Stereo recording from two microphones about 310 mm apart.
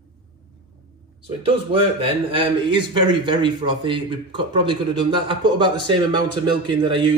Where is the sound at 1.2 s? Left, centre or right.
Centre.